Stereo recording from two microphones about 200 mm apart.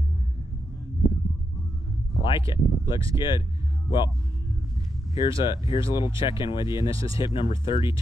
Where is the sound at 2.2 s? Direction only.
25° left (ahead or behind).